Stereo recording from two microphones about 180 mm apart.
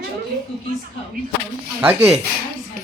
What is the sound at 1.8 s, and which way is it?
Speech, 10° right (ahead or behind).